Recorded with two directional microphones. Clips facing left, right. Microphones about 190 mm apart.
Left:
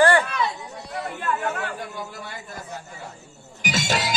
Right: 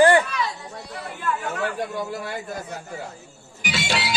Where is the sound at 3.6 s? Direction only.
45° left (ahead or behind).